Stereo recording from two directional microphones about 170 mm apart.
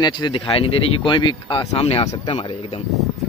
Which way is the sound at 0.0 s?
25° left (ahead or behind).